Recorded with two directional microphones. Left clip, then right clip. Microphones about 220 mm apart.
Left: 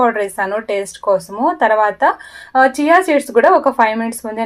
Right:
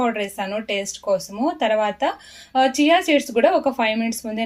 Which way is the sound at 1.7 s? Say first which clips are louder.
Left 7 dB; 55° left (ahead or behind).